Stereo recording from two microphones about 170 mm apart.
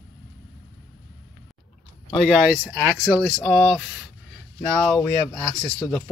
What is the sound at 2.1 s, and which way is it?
Speech, centre (ahead or behind).